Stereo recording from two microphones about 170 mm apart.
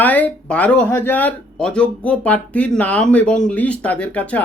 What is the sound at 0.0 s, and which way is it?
Speech, 10° left (ahead or behind).